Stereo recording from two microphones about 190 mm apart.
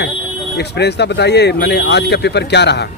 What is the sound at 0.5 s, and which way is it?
Speech, 60° left (ahead or behind).